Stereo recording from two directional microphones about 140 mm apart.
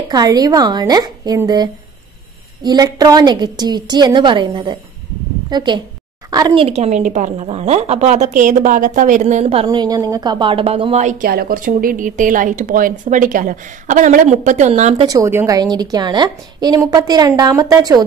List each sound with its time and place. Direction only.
0.1 s a woman's voice: 30° right (ahead or behind)
6.6 s a woman's voice: 50° right (ahead or behind)
9.7 s a woman's voice: 30° right (ahead or behind); by 15.0 s 55° right (ahead or behind)
15.0 s a woman's voice: 20° right (ahead or behind)